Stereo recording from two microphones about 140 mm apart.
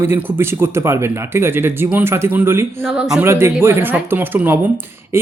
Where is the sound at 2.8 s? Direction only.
5° right (ahead or behind).